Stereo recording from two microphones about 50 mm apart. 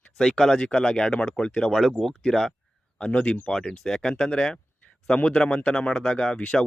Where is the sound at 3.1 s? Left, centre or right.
Left; by 5.2 s centre.